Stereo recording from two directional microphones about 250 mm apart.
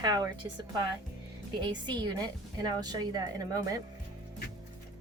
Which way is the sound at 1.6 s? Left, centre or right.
Centre.